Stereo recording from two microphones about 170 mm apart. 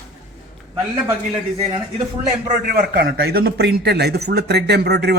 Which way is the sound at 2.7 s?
65° right (ahead or behind).